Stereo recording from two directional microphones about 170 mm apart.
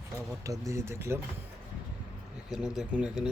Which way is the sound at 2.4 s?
5° right (ahead or behind).